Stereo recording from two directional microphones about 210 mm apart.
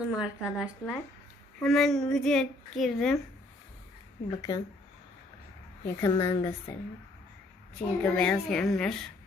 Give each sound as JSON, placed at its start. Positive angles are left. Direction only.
{"t": 0.0, "sound": "a child's voice", "side_deg": -5}
{"t": 4.4, "sound": "a woman's voice", "side_deg": 20}
{"t": 5.8, "sound": "a woman's voice", "side_deg": 15}
{"t": 8.0, "sound": "a child's voice", "side_deg": 5}